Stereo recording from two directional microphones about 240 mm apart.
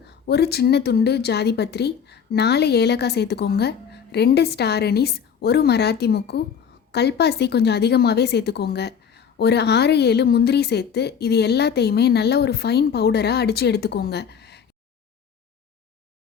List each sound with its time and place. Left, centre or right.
0.1 s a woman's voice: left